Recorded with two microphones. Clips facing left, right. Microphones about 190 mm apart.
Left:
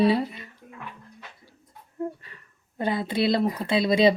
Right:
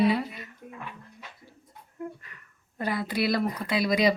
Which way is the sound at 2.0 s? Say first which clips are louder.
Left 6 dB; 30° left (ahead or behind).